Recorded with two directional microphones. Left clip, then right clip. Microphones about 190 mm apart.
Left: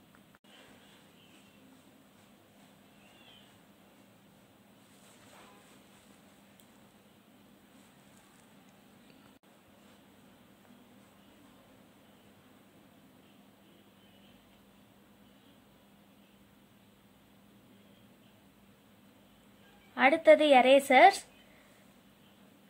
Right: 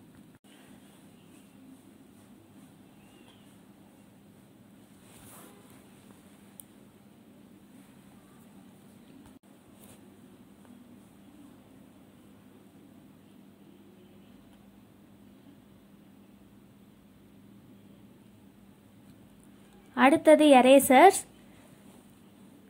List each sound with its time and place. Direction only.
19.9 s a woman's voice: 15° right (ahead or behind)